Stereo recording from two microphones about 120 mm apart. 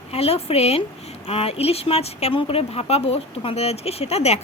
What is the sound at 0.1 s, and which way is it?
Speech, 55° left (ahead or behind).